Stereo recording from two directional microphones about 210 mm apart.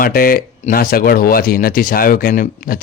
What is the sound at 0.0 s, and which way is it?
Speech, 40° left (ahead or behind).